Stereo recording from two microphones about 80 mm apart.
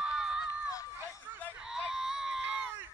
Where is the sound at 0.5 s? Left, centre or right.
Left.